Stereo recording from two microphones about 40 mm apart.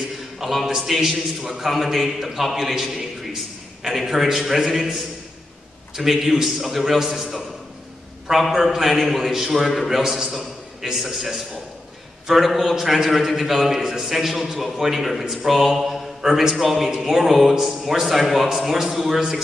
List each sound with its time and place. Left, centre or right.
0.4 s a man's voice: centre
5.9 s a man's voice: centre